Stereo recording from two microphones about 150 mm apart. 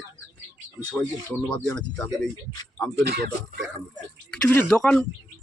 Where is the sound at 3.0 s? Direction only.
90° right.